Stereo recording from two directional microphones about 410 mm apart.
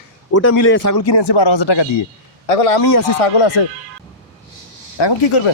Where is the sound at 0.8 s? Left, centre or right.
Left.